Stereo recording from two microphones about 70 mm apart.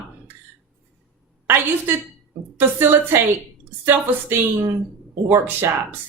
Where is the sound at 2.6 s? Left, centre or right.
Right.